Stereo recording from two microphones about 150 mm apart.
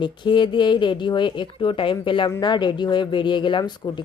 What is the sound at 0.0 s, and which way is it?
Speech, 30° left (ahead or behind).